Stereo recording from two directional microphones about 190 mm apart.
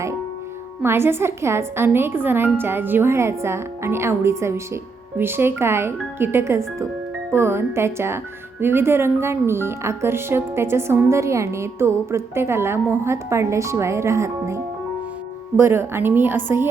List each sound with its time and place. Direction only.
0.8 s speech: 10° right (ahead or behind)